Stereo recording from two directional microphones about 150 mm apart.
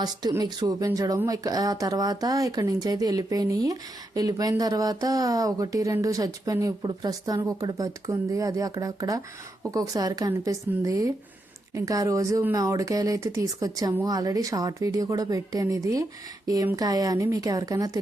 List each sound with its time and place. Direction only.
0.0 s speech: 25° right (ahead or behind)